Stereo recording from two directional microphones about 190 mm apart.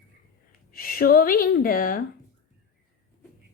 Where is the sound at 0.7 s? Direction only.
50° left (ahead or behind).